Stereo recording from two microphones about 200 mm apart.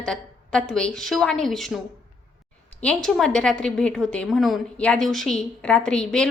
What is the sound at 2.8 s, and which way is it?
A woman's voice, 5° left (ahead or behind).